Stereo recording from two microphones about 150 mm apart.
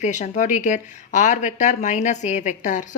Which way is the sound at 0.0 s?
55° left (ahead or behind).